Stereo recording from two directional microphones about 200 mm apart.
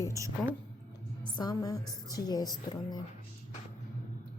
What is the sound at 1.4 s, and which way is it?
A woman's voice, 20° left (ahead or behind).